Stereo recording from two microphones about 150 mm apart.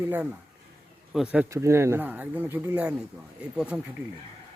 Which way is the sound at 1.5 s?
20° right (ahead or behind).